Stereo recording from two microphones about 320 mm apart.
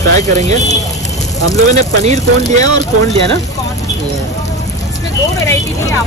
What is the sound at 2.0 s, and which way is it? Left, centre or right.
Speech, centre.